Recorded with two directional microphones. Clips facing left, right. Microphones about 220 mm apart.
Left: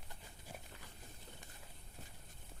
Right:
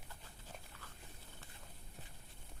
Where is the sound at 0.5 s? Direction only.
10° left (ahead or behind).